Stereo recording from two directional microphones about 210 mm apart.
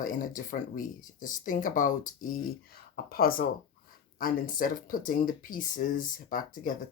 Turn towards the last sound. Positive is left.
turn(degrees=40)  # may be behind; listen again after turning